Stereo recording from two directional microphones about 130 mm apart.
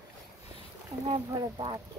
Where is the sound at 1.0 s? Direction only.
45° right (ahead or behind).